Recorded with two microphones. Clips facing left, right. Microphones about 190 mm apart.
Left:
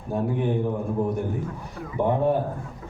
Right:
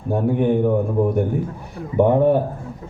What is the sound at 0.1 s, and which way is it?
Speech, 60° right (ahead or behind).